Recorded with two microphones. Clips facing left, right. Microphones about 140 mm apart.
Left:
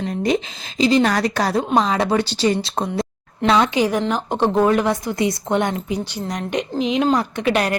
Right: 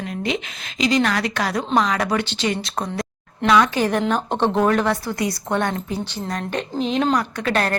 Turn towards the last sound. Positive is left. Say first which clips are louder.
# left 2 dB
turn(degrees=10)  # may be behind; listen again after turning